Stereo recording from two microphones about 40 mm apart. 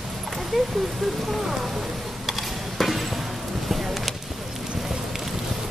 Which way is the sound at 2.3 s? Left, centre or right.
Centre.